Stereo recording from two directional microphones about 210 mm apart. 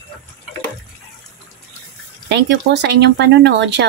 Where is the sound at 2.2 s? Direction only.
55° right (ahead or behind).